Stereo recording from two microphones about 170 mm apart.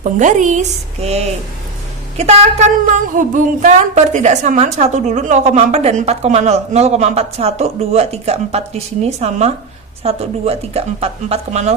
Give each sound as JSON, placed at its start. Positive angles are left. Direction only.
{"t": 0.0, "sound": "a woman's voice", "side_deg": -45}